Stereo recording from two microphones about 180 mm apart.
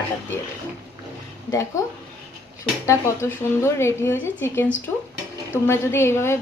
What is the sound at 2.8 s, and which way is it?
A woman's voice, 15° left (ahead or behind).